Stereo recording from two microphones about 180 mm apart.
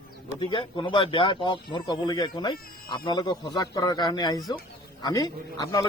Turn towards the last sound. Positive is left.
turn(degrees=20)  # may be behind; listen again after turning